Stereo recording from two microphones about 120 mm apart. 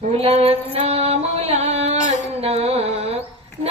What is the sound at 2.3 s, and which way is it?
Carnatic music, 60° right (ahead or behind).